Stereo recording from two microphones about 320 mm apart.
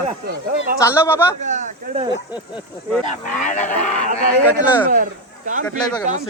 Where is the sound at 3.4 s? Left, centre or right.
Left.